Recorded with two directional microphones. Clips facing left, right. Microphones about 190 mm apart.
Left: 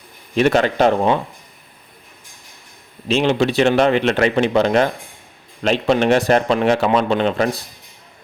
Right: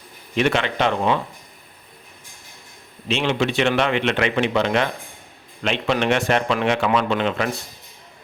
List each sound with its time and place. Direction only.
0.3 s a man's voice: 40° left (ahead or behind)
3.1 s a man's voice: 35° left (ahead or behind)